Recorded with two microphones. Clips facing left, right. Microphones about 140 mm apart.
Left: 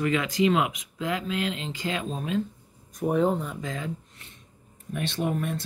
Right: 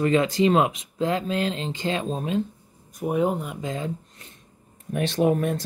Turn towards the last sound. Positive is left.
turn(degrees=-45)  # may be behind; listen again after turning